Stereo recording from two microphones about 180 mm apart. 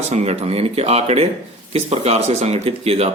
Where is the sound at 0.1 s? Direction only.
35° right (ahead or behind).